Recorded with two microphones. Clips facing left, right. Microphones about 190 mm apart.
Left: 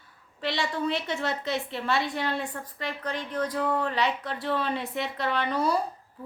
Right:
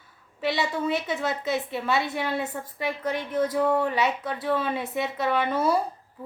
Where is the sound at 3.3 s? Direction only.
20° right (ahead or behind).